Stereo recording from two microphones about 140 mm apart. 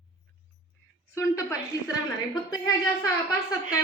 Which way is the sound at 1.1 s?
20° left (ahead or behind).